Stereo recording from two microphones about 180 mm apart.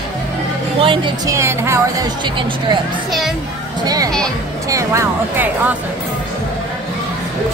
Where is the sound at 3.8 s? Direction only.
20° right (ahead or behind).